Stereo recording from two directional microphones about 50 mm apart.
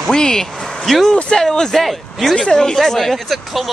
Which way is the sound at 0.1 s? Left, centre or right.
Centre.